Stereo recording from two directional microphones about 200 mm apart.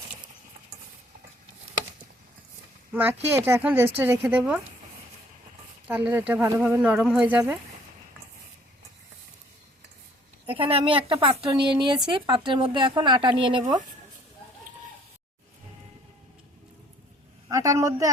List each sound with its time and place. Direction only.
2.9 s a woman's voice: 10° right (ahead or behind)
5.9 s a woman's voice: 10° right (ahead or behind)
10.4 s speech: 25° right (ahead or behind)
17.5 s a man's voice: 15° right (ahead or behind)